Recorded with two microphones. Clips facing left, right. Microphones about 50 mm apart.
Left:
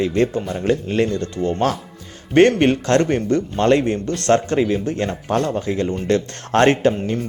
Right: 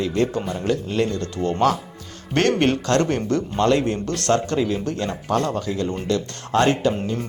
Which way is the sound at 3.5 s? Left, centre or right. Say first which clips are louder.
Left 2 dB; left.